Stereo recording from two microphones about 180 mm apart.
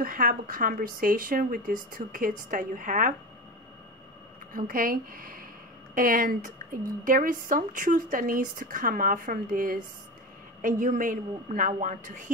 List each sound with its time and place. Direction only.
0.0 s a woman's voice: 50° right (ahead or behind)
4.6 s a woman's voice: 50° right (ahead or behind)